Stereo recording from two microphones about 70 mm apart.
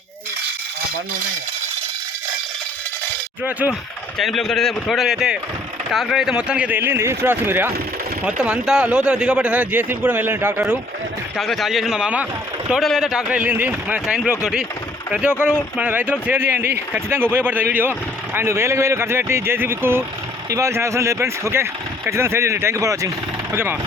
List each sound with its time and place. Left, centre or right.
4.2 s a man's voice: centre
6.7 s speech: right
8.2 s speech: centre
11.3 s a man's voice: centre
12.8 s a man's voice: centre
13.3 s speech: centre
18.3 s speech: right
22.8 s speech: right
23.5 s speech: right